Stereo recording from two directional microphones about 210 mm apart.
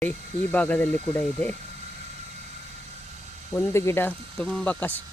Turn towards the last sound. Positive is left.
turn(degrees=10)  # may be behind; listen again after turning